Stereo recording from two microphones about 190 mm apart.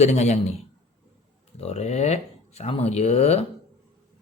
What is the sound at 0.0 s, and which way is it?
Speech, 35° left (ahead or behind).